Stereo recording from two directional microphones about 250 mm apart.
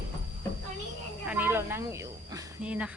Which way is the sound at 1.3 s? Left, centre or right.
Centre.